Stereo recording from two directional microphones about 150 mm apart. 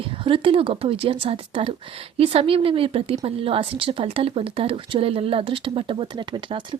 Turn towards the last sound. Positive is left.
turn(degrees=-35)  # may be behind; listen again after turning